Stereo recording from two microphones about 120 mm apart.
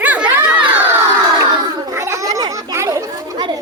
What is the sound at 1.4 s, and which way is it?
Children playing, 25° right (ahead or behind).